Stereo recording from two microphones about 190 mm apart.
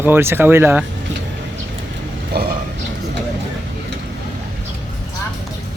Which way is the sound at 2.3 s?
55° right (ahead or behind).